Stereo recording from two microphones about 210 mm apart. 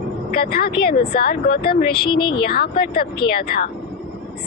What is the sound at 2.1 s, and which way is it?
Speech, 25° left (ahead or behind).